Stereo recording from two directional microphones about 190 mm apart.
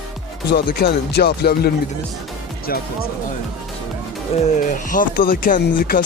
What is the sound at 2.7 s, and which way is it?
Speech, 50° left (ahead or behind).